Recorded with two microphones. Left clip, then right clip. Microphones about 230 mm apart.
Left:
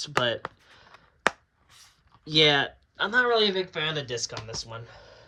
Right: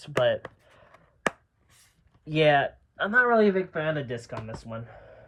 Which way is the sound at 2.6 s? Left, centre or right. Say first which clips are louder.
Even; centre.